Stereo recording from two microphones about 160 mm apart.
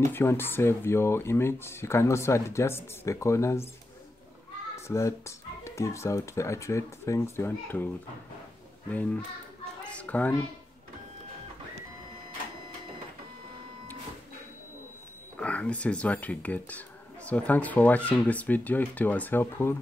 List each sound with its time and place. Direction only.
0.1 s speech: 15° left (ahead or behind)
4.7 s speech: 20° left (ahead or behind)
9.8 s a sound: 10° left (ahead or behind)
15.3 s speech: 10° left (ahead or behind)